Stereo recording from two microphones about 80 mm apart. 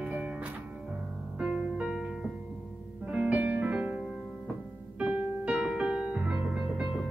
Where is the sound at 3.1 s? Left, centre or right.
Centre.